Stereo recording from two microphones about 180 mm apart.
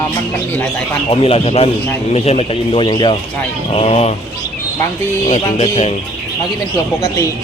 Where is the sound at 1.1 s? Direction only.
30° left (ahead or behind).